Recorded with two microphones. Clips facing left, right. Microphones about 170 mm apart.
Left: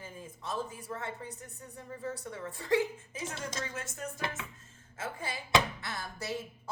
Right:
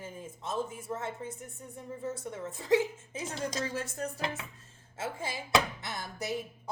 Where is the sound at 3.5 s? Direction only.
35° right (ahead or behind).